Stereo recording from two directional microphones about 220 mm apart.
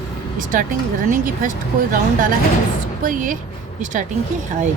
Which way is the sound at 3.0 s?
35° right (ahead or behind).